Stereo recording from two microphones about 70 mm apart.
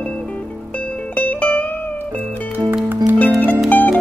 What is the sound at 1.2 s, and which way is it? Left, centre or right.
Music, left.